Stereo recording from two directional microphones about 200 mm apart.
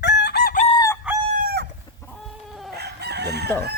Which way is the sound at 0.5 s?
35° left (ahead or behind).